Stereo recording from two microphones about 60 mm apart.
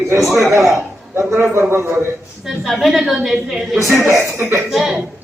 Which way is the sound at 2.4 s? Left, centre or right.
Centre.